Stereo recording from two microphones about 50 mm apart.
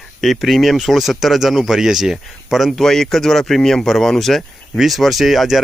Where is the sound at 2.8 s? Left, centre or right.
Centre.